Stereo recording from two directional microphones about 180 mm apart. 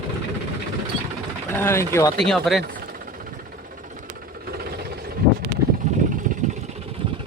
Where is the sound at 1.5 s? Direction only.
15° left (ahead or behind).